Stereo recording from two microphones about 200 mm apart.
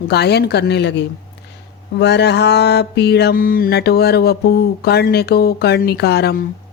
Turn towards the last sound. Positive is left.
turn(degrees=50)  # may be behind; listen again after turning